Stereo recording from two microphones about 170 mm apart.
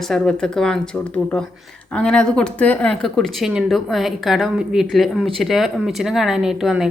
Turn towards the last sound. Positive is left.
turn(degrees=-5)  # may be behind; listen again after turning